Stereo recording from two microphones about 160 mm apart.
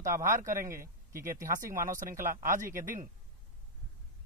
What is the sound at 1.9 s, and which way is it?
Speech, 55° right (ahead or behind).